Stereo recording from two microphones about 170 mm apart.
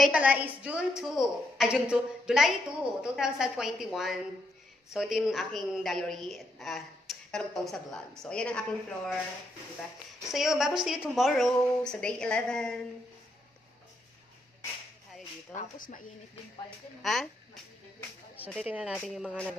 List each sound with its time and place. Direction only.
0.0 s a woman's voice: 10° right (ahead or behind)
10.3 s a woman's voice: centre (ahead or behind)
15.5 s speech: 50° left (ahead or behind)
17.0 s a woman's voice: centre (ahead or behind)
18.4 s a woman's voice: 10° right (ahead or behind)